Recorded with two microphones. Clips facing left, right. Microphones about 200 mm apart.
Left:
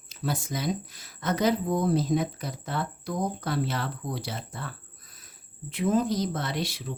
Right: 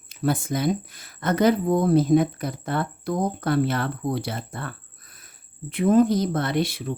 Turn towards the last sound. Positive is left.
turn(degrees=-55)  # may be behind; listen again after turning